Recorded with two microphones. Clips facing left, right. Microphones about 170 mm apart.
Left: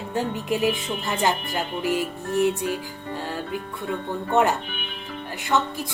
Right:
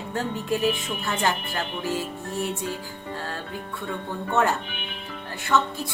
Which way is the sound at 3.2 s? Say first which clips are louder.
Left 5 dB; 15° left (ahead or behind).